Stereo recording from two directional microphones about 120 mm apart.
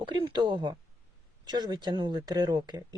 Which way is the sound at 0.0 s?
45° right (ahead or behind).